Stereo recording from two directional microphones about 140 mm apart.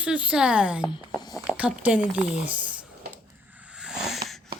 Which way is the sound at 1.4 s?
10° right (ahead or behind).